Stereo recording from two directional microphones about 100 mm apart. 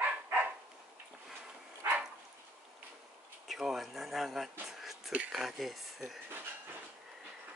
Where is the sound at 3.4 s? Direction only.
5° right (ahead or behind).